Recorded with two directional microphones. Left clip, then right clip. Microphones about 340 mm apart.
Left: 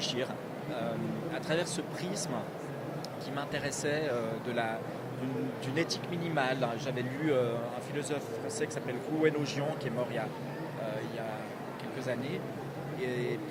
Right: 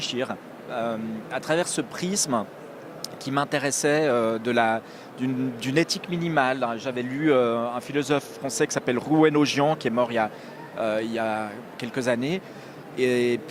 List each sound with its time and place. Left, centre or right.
0.0 s speech: right